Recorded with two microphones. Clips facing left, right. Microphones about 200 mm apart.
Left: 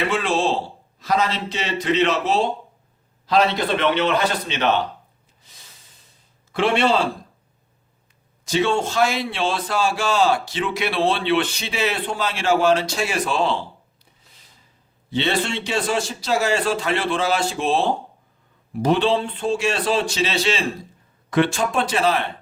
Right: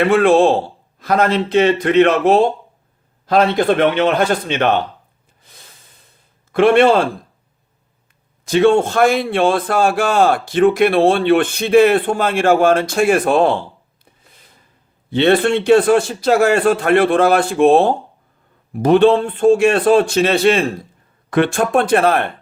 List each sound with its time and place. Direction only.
0.0 s a man's voice: 55° right (ahead or behind)
5.4 s snort: 55° right (ahead or behind)
6.5 s a man's voice: 55° right (ahead or behind)
8.4 s a man's voice: 55° right (ahead or behind)